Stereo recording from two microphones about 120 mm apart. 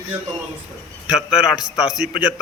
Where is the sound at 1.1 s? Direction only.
5° right (ahead or behind).